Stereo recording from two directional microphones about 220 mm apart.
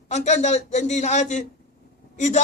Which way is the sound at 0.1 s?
30° left (ahead or behind).